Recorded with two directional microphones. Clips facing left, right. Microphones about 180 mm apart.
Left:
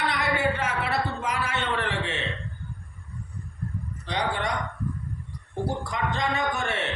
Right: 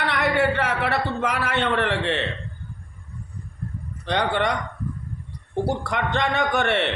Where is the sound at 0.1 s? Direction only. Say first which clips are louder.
Right 5 dB; 65° right (ahead or behind).